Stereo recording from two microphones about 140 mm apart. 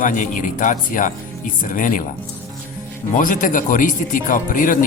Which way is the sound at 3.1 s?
70° left (ahead or behind).